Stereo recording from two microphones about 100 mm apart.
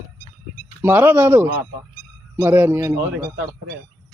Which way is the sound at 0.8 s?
20° right (ahead or behind).